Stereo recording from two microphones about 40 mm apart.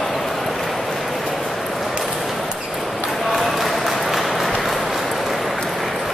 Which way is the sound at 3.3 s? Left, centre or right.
Centre.